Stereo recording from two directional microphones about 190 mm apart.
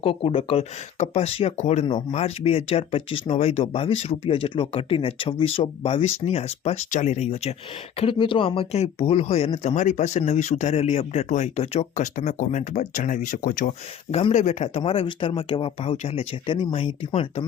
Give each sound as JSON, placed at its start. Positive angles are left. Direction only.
{"t": 0.0, "sound": "speech", "side_deg": 30}
{"t": 1.9, "sound": "speech", "side_deg": 25}
{"t": 14.1, "sound": "speech", "side_deg": 30}